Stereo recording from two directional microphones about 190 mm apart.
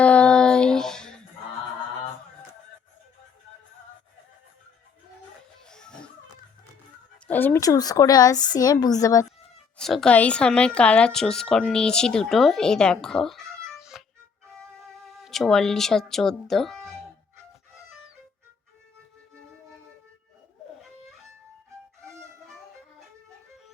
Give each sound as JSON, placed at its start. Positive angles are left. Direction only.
{"t": 0.0, "sound": "child singing", "side_deg": 5}
{"t": 5.6, "sound": "music", "side_deg": 5}
{"t": 7.3, "sound": "speech", "side_deg": 10}
{"t": 9.7, "sound": "a woman's voice", "side_deg": 0}